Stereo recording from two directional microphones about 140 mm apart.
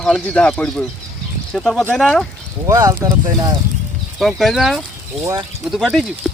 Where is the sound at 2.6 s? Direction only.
25° right (ahead or behind).